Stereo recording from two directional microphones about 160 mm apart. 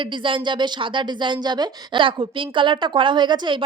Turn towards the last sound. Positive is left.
turn(degrees=-30)  # may be behind; listen again after turning